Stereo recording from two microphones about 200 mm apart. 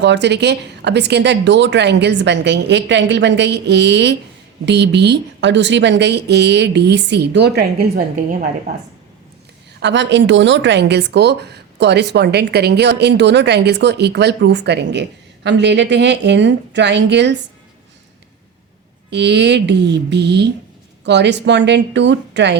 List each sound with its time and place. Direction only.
0.0 s speech: 60° right (ahead or behind); by 8.7 s 40° right (ahead or behind)
9.8 s speech: 60° right (ahead or behind)
19.1 s speech: 60° right (ahead or behind)